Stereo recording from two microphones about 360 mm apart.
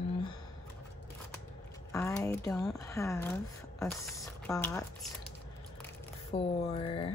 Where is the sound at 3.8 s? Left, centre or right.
Centre.